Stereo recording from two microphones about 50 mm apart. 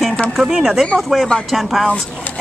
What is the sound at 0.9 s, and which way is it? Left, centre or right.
Speech, centre.